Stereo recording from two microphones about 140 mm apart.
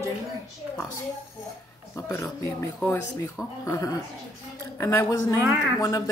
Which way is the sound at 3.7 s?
25° left (ahead or behind).